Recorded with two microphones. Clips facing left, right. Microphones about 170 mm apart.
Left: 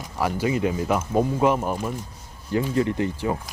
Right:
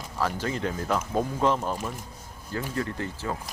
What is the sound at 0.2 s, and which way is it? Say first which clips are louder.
Speech: left 5 dB; 10° left (ahead or behind).